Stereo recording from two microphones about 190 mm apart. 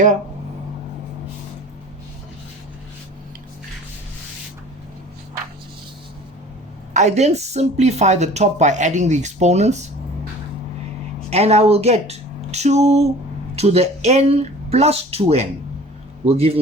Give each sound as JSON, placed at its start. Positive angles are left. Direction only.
{"t": 6.9, "sound": "a woman's voice", "side_deg": -35}
{"t": 11.3, "sound": "a woman's voice", "side_deg": -35}